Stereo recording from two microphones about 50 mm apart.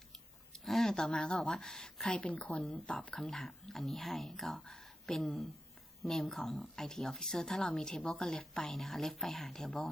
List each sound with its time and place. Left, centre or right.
0.1 s speech: centre; by 3.2 s left
3.2 s speech: centre